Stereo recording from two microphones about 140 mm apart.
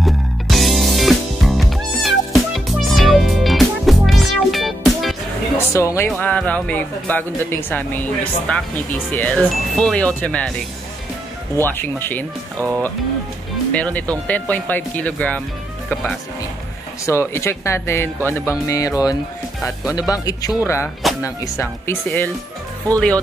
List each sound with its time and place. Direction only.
0.0 s music: centre (ahead or behind)
5.7 s speech: 20° left (ahead or behind)
6.0 s speech: 10° left (ahead or behind)
11.5 s speech: 15° left (ahead or behind)
12.5 s speech: 20° right (ahead or behind)
13.7 s speech: 10° left (ahead or behind)
17.0 s speech: 20° left (ahead or behind)